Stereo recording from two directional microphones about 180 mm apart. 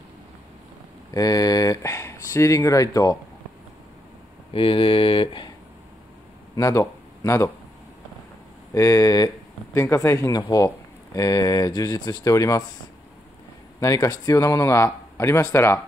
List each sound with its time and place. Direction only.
1.1 s speech: 20° left (ahead or behind)
4.5 s speech: 30° left (ahead or behind)
6.5 s speech: 20° left (ahead or behind)
8.7 s speech: 20° left (ahead or behind)
13.7 s speech: 20° left (ahead or behind)